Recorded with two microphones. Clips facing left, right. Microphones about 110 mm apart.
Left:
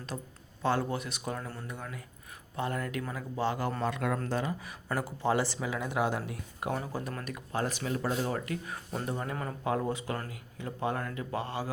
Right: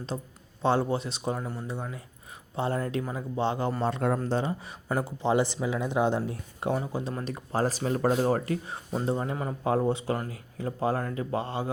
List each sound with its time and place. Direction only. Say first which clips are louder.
0.1 s speech: right 5 dB; 25° right (ahead or behind)
7.3 s speech: right 5 dB; 35° right (ahead or behind)
8.6 s speech: right 6 dB; 25° right (ahead or behind)